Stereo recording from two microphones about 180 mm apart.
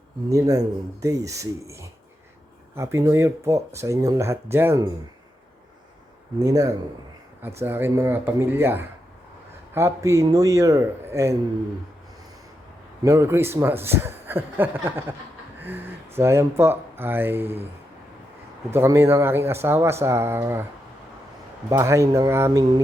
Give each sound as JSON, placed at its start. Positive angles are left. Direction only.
{"t": 0.3, "sound": "a man's voice", "side_deg": -20}
{"t": 6.4, "sound": "a man's voice", "side_deg": -20}
{"t": 13.0, "sound": "a man's voice", "side_deg": -15}
{"t": 18.7, "sound": "a man's voice", "side_deg": -15}
{"t": 21.7, "sound": "a man's voice", "side_deg": -15}